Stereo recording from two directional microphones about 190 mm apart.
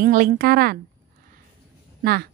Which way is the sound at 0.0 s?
50° right (ahead or behind).